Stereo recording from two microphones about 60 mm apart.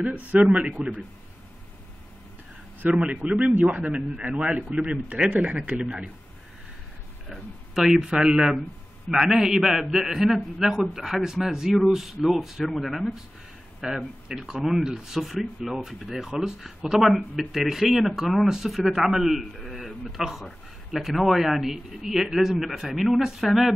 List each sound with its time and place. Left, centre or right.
0.3 s speech: right
2.8 s speech: right
7.2 s a man's voice: centre